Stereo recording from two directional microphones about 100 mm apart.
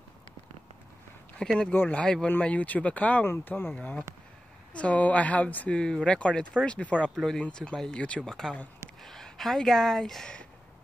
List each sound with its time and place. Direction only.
1.4 s speech: 5° left (ahead or behind)
1.7 s speech: 20° left (ahead or behind)